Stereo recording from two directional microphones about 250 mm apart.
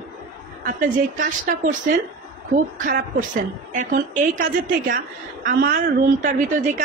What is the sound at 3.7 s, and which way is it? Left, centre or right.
Speech, right.